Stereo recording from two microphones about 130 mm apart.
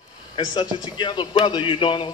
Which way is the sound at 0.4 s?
35° left (ahead or behind).